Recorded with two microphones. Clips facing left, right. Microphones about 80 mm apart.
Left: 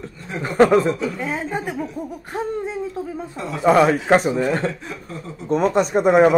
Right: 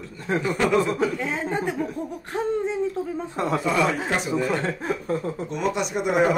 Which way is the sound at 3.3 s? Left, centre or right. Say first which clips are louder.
Right 4 dB; right.